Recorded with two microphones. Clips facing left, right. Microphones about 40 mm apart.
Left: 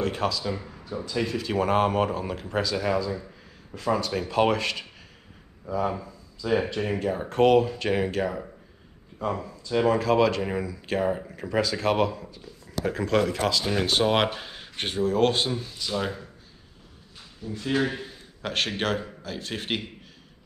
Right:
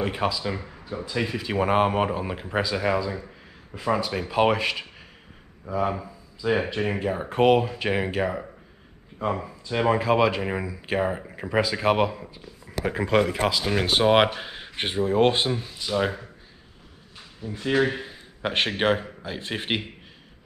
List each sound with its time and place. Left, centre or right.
0.0 s speech: centre
17.4 s speech: centre